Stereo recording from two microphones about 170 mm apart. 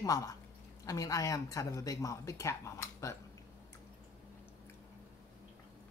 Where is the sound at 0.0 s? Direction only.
20° left (ahead or behind).